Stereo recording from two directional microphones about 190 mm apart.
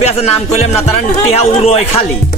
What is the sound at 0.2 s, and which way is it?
Speech, 35° left (ahead or behind).